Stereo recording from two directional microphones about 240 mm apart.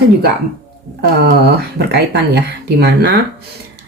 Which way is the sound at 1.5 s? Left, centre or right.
Right.